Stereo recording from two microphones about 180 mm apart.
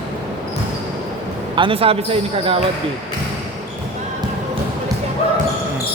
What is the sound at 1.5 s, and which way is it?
Speech, 30° right (ahead or behind).